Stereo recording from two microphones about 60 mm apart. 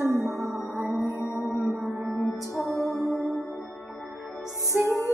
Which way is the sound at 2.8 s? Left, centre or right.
Right.